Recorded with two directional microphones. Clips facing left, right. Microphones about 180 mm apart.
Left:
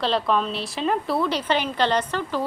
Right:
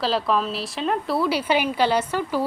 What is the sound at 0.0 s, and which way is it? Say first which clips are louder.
A woman's voice: even; 5° right (ahead or behind).